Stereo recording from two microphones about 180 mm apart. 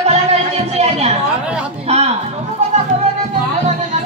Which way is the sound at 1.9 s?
35° right (ahead or behind).